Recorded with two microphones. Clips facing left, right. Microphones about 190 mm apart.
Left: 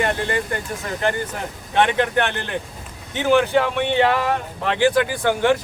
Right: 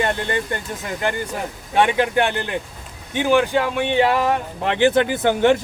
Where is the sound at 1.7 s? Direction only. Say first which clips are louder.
Right 1 dB; 10° right (ahead or behind).